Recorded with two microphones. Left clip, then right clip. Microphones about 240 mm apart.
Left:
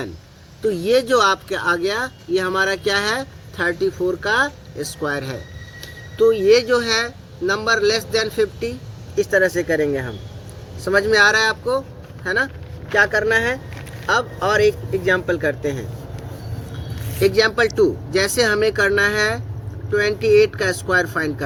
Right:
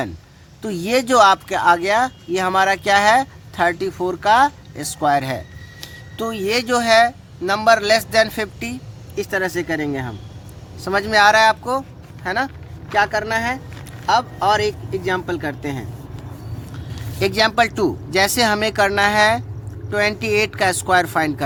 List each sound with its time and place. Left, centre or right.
0.6 s speech: right
17.2 s speech: right